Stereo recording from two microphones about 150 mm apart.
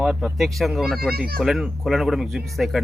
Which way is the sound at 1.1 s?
80° right.